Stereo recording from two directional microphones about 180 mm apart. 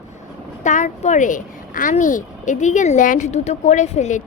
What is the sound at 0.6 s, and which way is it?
A woman's voice, 40° left (ahead or behind).